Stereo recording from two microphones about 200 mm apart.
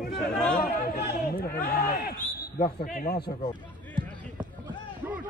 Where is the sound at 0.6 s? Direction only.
50° left (ahead or behind).